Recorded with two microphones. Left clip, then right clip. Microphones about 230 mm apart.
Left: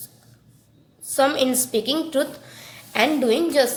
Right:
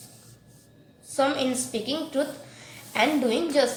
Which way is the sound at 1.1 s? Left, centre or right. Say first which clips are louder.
Left 5 dB; left.